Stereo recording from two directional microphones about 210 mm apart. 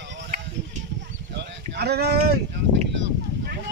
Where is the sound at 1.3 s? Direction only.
50° right (ahead or behind).